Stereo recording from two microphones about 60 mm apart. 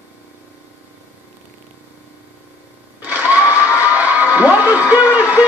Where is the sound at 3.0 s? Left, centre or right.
Right.